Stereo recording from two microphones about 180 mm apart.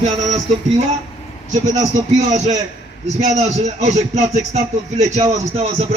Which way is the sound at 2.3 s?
40° right (ahead or behind).